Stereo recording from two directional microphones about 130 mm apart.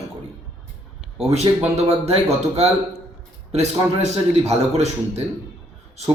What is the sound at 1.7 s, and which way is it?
Speech, 55° right (ahead or behind).